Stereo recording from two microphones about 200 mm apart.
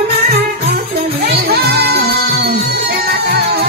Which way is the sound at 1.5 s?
55° right (ahead or behind).